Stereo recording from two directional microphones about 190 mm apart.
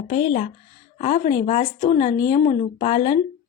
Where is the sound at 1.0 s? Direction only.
40° left (ahead or behind).